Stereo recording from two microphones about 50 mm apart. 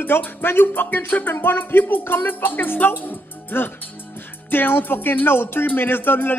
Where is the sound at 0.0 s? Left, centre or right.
Left.